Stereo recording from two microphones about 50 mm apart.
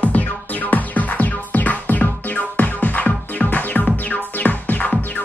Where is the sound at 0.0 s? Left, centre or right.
Left.